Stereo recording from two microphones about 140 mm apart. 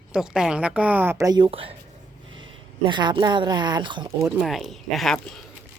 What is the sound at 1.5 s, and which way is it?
Speech, 45° right (ahead or behind).